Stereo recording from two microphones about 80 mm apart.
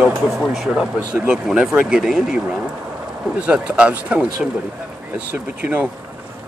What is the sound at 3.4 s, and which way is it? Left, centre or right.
Speech, centre.